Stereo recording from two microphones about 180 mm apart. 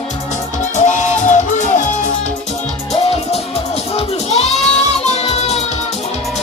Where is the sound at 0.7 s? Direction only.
45° left (ahead or behind).